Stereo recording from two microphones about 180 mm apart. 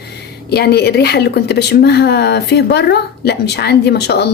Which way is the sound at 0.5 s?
60° left (ahead or behind).